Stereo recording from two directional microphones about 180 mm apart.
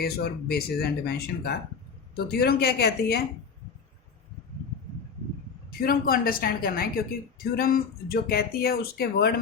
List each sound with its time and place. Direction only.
0.0 s speech: 60° left (ahead or behind)
5.8 s speech: 55° left (ahead or behind)